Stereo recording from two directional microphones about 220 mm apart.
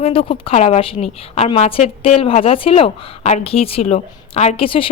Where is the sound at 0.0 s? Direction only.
25° left (ahead or behind).